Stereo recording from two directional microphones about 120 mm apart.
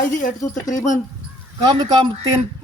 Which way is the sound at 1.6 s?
35° right (ahead or behind).